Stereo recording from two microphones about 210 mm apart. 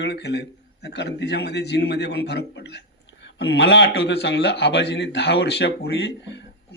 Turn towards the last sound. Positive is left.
turn(degrees=55)  # may be behind; listen again after turning